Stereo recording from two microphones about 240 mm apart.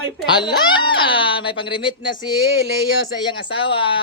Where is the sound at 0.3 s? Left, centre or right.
Centre.